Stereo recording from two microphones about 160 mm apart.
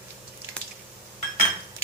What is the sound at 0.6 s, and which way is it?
Squish, 5° left (ahead or behind).